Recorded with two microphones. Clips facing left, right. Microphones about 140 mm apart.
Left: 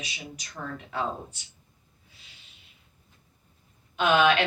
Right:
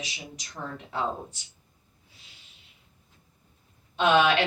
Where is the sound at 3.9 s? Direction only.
30° right (ahead or behind).